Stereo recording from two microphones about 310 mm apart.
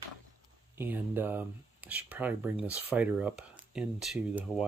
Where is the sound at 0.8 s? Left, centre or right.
Centre.